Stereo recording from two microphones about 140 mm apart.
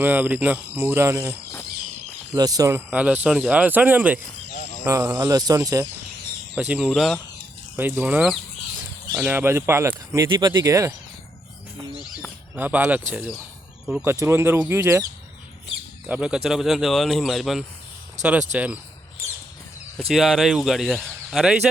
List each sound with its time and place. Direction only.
0.0 s speech: 10° right (ahead or behind)
2.3 s speech: 25° right (ahead or behind)
6.6 s speech: 10° right (ahead or behind)
7.8 s speech: 15° right (ahead or behind)
12.5 s speech: 15° right (ahead or behind)
16.0 s speech: 10° right (ahead or behind)
18.2 s speech: 60° right (ahead or behind)
18.5 s speech: 10° right (ahead or behind)
20.1 s speech: centre (ahead or behind)